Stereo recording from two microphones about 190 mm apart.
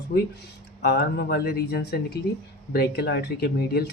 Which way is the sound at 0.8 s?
60° left (ahead or behind).